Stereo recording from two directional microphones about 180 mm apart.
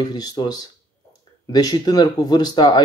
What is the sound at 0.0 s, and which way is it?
Speech, 20° left (ahead or behind).